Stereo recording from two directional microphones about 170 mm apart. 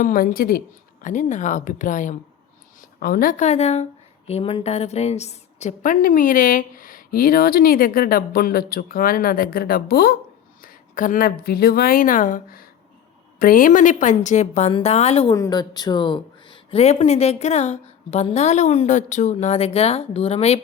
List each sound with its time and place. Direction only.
0.0 s a woman's voice: 55° left (ahead or behind)
1.0 s a woman's voice: 45° left (ahead or behind)
3.0 s a woman's voice: 60° left (ahead or behind); by 15.3 s 40° left (ahead or behind)
15.3 s speech: 20° left (ahead or behind); by 20.6 s 35° left (ahead or behind)